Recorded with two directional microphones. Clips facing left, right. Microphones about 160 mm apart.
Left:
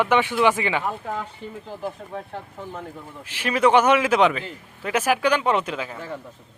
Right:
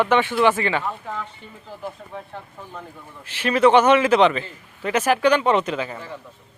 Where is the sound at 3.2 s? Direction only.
10° left (ahead or behind).